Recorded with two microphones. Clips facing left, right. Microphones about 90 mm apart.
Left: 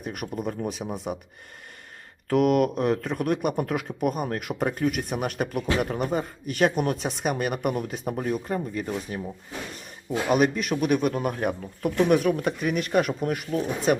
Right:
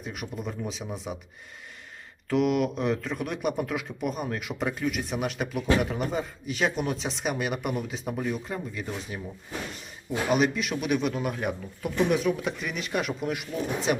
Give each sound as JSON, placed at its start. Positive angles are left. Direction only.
{"t": 0.0, "sound": "speech", "side_deg": 50}
{"t": 2.3, "sound": "speech", "side_deg": 50}